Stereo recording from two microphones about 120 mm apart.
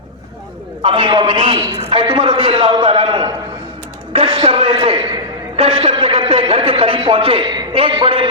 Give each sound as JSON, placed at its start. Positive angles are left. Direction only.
{"t": 0.8, "sound": "a man's voice", "side_deg": -45}